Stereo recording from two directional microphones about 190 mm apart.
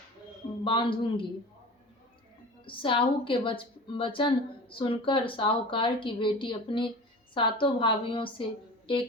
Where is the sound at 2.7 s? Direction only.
25° left (ahead or behind).